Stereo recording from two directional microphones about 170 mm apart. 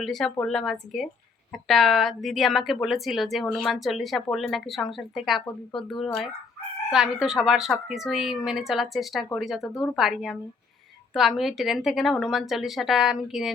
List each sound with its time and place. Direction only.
0.0 s a woman's voice: centre (ahead or behind)